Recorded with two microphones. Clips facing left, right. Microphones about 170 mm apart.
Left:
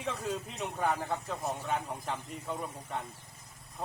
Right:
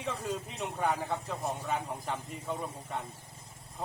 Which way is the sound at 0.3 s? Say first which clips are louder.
Even; 5° right (ahead or behind).